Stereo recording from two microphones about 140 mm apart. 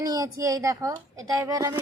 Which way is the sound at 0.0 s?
25° right (ahead or behind).